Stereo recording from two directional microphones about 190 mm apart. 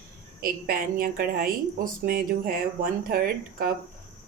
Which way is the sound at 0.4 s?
50° right (ahead or behind).